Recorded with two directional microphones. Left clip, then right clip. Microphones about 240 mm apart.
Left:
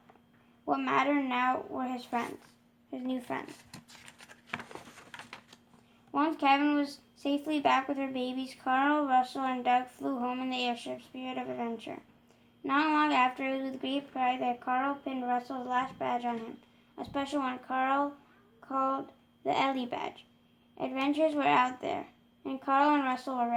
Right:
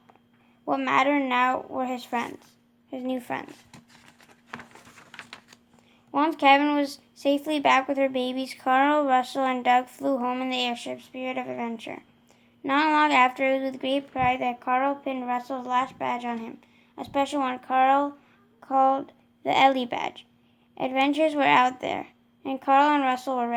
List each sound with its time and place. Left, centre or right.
0.6 s speech: right
3.7 s a sound: centre
6.1 s speech: right